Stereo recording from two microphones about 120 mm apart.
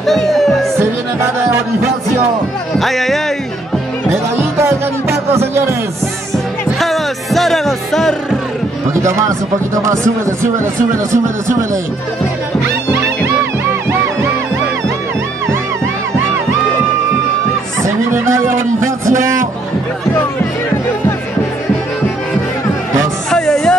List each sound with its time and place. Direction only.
0.0 s speech: centre (ahead or behind)
0.7 s music: 20° right (ahead or behind)
2.8 s music: centre (ahead or behind)
4.1 s music: 20° right (ahead or behind)
6.8 s music: centre (ahead or behind)
18.1 s a sound: 20° right (ahead or behind)
23.3 s music: 5° left (ahead or behind)